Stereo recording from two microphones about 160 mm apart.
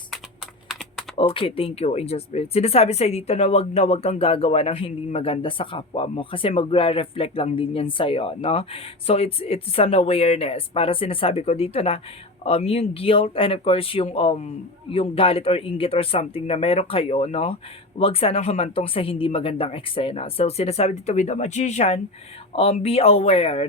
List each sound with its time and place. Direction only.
1.1 s speech: 30° left (ahead or behind)